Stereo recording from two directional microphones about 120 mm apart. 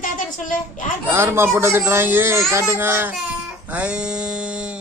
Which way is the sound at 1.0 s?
20° right (ahead or behind).